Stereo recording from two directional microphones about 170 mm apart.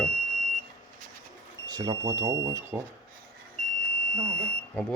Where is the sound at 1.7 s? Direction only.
25° right (ahead or behind).